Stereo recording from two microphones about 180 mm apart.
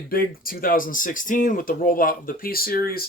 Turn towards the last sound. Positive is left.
turn(degrees=55)  # may be behind; listen again after turning